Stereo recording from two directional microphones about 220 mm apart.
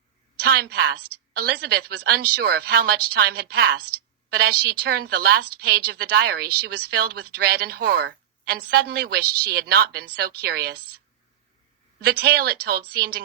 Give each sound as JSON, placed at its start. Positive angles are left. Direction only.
{"t": 0.3, "sound": "a woman's voice", "side_deg": -45}
{"t": 11.9, "sound": "a woman's voice", "side_deg": -45}